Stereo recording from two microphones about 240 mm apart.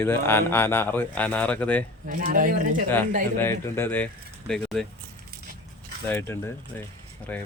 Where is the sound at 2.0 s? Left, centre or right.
Right.